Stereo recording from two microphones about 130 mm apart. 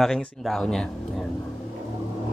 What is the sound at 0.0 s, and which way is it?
Speech, 5° left (ahead or behind).